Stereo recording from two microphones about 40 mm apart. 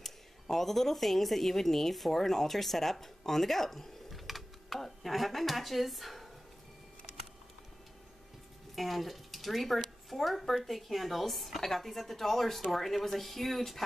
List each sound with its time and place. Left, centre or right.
0.0 s speech: centre
8.7 s a woman's voice: centre